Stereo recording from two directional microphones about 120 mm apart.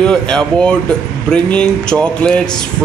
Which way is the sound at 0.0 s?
5° left (ahead or behind).